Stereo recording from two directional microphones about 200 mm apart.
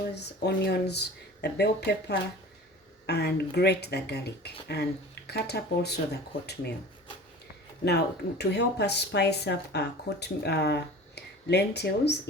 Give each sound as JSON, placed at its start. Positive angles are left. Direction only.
{"t": 0.1, "sound": "speech", "side_deg": 55}
{"t": 7.9, "sound": "speech", "side_deg": 55}